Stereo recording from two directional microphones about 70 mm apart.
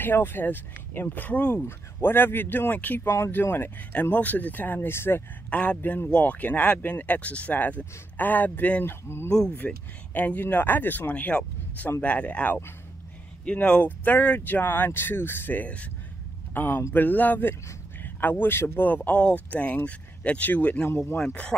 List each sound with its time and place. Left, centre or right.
0.0 s speech: left
5.5 s speech: left
20.9 s speech: left
21.2 s speech: centre